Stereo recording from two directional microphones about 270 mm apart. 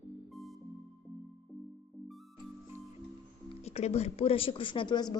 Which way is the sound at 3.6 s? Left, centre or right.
Left.